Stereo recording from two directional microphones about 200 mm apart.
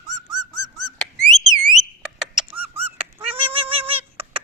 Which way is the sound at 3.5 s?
25° right (ahead or behind).